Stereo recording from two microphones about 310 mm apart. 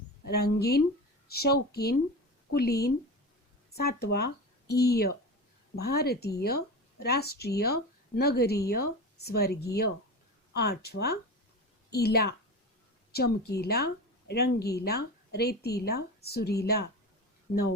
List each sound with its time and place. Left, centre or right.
0.3 s a woman's voice: left